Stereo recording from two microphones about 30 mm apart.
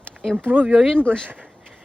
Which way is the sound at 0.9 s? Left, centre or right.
Left.